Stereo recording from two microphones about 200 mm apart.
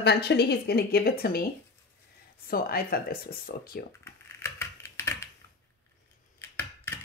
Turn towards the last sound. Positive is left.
turn(degrees=10)  # may be behind; listen again after turning